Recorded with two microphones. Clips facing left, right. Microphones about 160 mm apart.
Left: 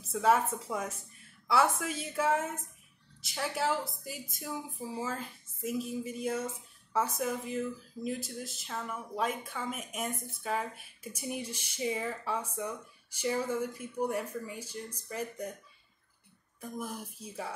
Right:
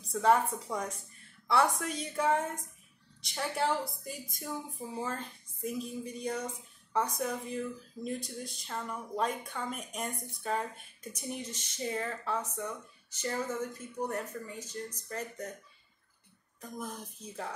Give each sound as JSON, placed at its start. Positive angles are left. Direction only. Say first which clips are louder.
{"t": 0.0, "sound": "speech", "louder": "right 1 dB", "side_deg": 5}
{"t": 16.6, "sound": "speech", "louder": "left 2 dB", "side_deg": 10}